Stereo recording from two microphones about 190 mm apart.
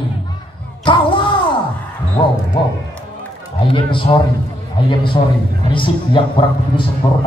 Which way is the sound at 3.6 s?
25° left (ahead or behind).